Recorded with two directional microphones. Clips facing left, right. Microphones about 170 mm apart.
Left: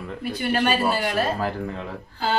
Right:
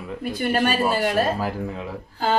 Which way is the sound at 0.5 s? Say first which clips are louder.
Even; 45° right (ahead or behind).